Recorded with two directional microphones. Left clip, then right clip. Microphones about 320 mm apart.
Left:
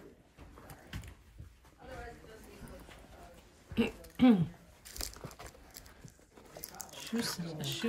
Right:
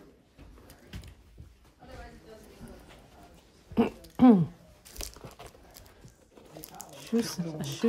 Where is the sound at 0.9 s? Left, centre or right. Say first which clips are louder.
Even; centre.